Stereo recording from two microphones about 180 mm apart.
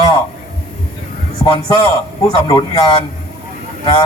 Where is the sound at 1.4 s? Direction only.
25° left (ahead or behind).